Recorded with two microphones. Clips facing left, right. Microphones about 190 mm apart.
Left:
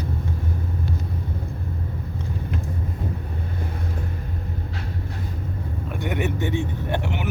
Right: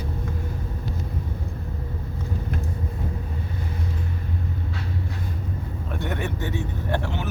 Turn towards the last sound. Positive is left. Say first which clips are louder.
# left 1 dB
turn(degrees=20)  # may be behind; listen again after turning